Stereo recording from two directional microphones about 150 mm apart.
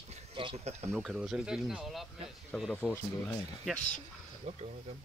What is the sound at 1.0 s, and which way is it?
Speech, 5° right (ahead or behind).